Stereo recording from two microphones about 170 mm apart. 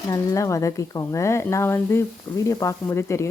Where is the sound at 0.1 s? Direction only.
20° left (ahead or behind).